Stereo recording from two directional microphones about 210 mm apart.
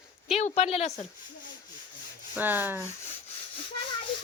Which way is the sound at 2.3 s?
10° right (ahead or behind).